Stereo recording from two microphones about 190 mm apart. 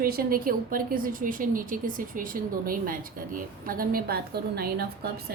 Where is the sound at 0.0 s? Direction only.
50° right (ahead or behind).